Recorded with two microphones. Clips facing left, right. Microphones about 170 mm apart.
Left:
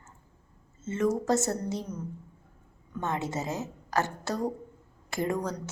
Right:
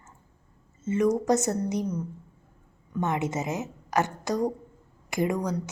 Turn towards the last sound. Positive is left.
turn(degrees=-15)  # may be behind; listen again after turning